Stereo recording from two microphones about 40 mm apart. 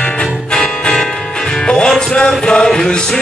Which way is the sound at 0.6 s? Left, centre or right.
Left.